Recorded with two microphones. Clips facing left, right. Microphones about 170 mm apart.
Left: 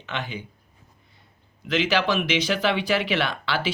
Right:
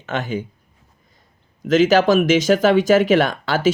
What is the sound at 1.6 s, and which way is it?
Speech, 45° right (ahead or behind).